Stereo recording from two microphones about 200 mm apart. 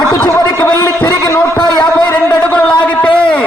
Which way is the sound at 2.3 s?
5° left (ahead or behind).